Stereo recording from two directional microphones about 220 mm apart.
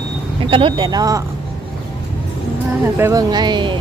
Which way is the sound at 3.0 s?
15° right (ahead or behind).